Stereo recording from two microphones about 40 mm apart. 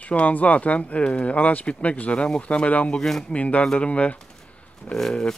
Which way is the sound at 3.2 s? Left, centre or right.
Left.